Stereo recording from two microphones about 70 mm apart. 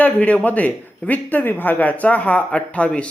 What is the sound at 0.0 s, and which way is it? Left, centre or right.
Speech, left.